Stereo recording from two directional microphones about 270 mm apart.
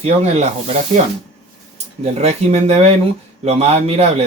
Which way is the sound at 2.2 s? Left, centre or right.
Right.